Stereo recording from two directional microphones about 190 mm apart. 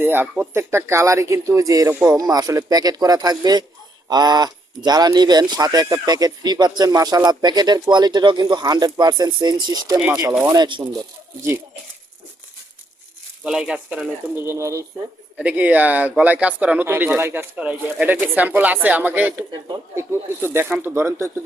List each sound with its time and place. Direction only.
0.0 s speech: 10° right (ahead or behind)
13.4 s speech: 5° right (ahead or behind)
19.6 s speech: 20° right (ahead or behind)
20.4 s speech: 10° right (ahead or behind)